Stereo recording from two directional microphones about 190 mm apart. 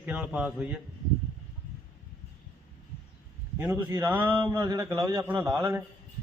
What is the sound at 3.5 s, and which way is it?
A man's voice, 10° right (ahead or behind).